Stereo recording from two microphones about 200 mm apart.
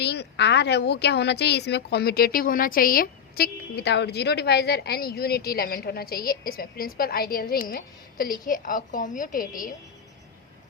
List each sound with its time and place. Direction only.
0.0 s speech: 55° left (ahead or behind)